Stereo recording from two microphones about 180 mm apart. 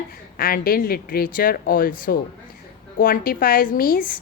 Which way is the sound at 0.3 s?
55° left (ahead or behind).